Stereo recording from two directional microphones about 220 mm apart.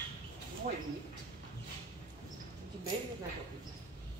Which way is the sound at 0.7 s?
35° right (ahead or behind).